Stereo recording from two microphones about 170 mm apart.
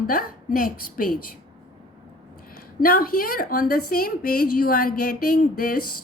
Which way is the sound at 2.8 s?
60° left (ahead or behind).